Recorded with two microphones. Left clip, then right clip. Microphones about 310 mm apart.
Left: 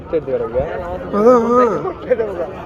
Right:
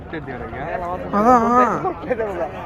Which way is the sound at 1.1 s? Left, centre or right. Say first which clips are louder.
Left 3 dB; centre.